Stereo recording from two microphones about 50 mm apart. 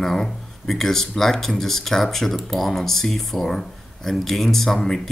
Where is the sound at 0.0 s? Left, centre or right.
Centre.